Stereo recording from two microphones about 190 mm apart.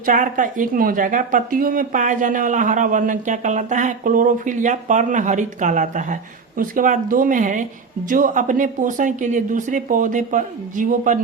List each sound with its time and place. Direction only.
0.0 s speech: 45° right (ahead or behind)